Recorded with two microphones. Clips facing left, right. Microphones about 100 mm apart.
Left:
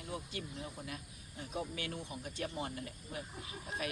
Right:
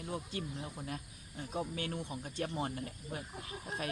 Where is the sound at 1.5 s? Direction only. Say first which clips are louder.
Right 3 dB; 35° right (ahead or behind).